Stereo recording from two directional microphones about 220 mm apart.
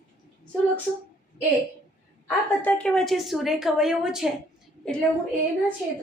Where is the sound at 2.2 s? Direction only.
5° left (ahead or behind).